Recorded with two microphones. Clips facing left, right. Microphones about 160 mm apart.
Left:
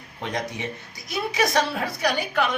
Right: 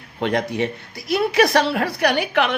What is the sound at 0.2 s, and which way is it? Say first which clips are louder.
A woman's voice: right 8 dB; 65° right (ahead or behind).